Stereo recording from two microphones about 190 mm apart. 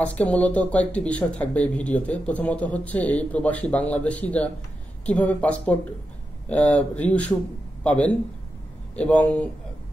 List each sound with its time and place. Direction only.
0.0 s a man's voice: 5° left (ahead or behind)